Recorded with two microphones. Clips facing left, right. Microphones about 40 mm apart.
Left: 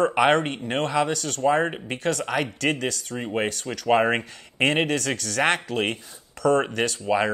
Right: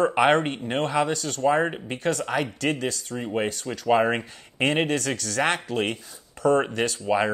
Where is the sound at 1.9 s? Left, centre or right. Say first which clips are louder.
Even; left.